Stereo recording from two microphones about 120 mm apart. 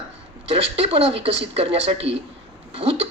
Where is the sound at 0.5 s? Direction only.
55° right (ahead or behind).